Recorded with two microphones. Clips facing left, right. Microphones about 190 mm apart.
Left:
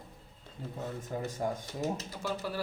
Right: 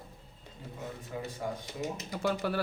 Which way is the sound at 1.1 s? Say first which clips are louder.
Left 3 dB; 45° left (ahead or behind).